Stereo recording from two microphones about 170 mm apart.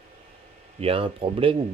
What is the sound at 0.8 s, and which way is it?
Speech, 35° right (ahead or behind).